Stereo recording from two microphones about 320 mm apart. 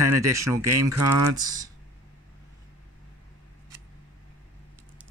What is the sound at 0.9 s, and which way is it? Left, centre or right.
Speech, right.